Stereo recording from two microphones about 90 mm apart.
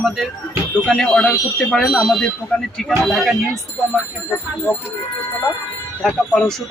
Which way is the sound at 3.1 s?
Centre (ahead or behind).